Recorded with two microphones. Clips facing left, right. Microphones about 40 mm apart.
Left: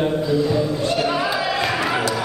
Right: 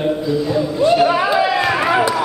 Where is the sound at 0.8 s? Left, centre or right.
Centre.